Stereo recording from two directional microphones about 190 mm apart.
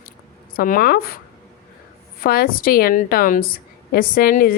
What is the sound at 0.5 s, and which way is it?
Speech, 50° left (ahead or behind).